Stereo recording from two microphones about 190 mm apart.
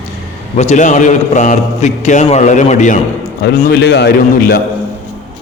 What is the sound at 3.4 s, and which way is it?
A man's voice, 60° left (ahead or behind).